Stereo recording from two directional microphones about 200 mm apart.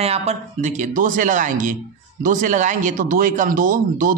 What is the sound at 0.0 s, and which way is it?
Speech, 30° right (ahead or behind).